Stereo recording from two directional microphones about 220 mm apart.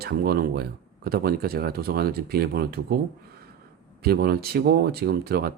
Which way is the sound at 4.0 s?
45° right (ahead or behind).